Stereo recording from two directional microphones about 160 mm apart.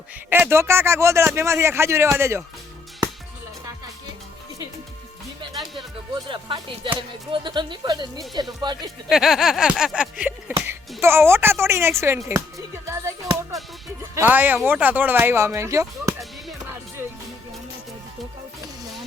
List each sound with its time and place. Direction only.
0.3 s speech: 15° right (ahead or behind)
6.2 s speech: 30° right (ahead or behind)
9.0 s a sound: centre (ahead or behind)
10.7 s speech: 15° right (ahead or behind)